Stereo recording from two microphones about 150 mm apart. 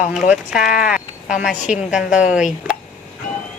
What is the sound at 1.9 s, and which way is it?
Speech, 5° right (ahead or behind).